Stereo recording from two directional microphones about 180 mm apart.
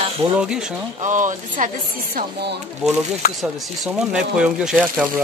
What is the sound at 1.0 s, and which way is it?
Speech, 45° right (ahead or behind).